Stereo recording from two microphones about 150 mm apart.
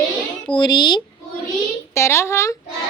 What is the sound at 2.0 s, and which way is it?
Speech, 15° left (ahead or behind).